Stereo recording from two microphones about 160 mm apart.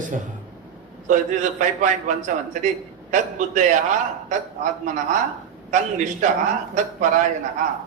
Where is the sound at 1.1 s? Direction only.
50° right (ahead or behind).